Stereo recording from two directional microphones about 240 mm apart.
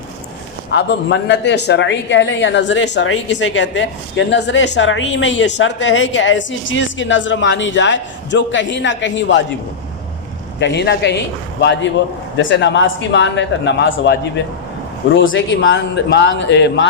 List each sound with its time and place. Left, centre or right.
0.7 s speech: left
10.6 s speech: left